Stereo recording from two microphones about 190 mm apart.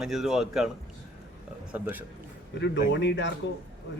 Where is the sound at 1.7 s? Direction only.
10° right (ahead or behind).